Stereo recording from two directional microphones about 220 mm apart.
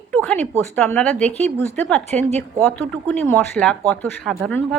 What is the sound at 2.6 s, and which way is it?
A woman's voice, 10° left (ahead or behind).